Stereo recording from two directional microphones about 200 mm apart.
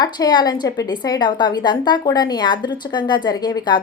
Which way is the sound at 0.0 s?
20° left (ahead or behind).